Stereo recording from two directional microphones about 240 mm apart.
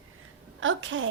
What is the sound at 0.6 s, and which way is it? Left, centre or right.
Speech, right.